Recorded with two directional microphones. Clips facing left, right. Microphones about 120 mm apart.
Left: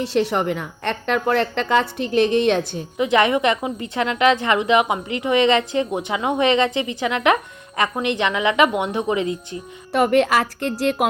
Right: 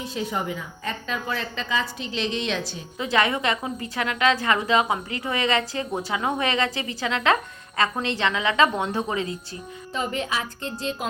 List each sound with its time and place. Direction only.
0.0 s a woman's voice: 75° left (ahead or behind); by 2.8 s 55° left (ahead or behind)
3.0 s a woman's voice: 20° left (ahead or behind)
9.9 s a woman's voice: 75° left (ahead or behind)